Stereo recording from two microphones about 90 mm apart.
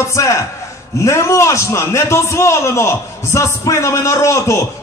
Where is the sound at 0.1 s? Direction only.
35° left (ahead or behind).